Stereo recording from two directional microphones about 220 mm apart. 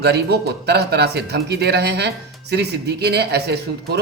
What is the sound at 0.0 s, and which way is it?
Speech, 50° right (ahead or behind).